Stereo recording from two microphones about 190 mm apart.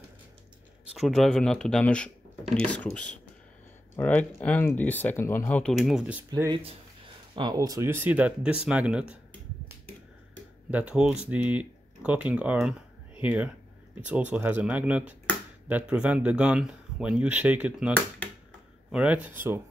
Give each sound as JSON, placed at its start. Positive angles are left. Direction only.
{"t": 0.9, "sound": "speech", "side_deg": 0}
{"t": 6.3, "sound": "speech", "side_deg": -20}
{"t": 10.7, "sound": "speech", "side_deg": -5}